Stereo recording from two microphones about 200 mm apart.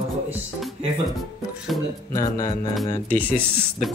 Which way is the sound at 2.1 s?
20° left (ahead or behind).